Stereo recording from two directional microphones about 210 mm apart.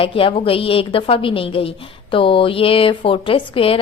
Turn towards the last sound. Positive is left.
turn(degrees=25)  # may be behind; listen again after turning